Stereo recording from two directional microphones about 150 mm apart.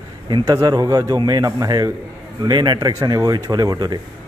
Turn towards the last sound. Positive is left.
turn(degrees=-25)  # may be behind; listen again after turning